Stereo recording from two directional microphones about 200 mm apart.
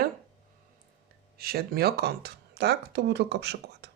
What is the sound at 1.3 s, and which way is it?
Speech, 50° right (ahead or behind).